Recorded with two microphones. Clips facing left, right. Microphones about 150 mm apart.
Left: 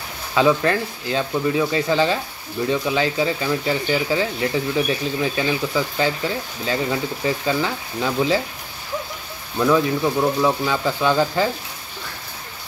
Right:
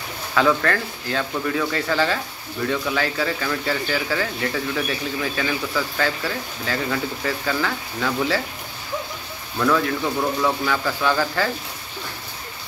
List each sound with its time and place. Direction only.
0.3 s speech: 20° left (ahead or behind)
9.6 s speech: 20° left (ahead or behind)